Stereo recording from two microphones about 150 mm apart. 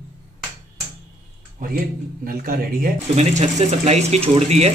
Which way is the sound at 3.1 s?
50° right (ahead or behind).